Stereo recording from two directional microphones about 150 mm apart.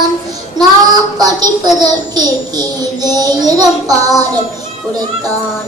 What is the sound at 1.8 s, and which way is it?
A child's voice, 25° right (ahead or behind).